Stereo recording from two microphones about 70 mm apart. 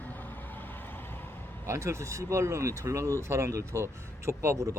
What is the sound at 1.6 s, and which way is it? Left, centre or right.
Speech, right.